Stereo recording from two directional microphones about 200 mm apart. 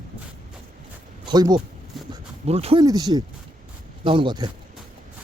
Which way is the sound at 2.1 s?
30° right (ahead or behind).